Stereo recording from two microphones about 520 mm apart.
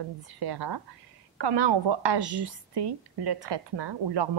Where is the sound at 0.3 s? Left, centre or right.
Right.